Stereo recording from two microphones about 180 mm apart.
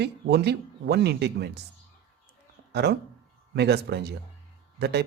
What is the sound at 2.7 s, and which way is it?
Speech, 65° right (ahead or behind).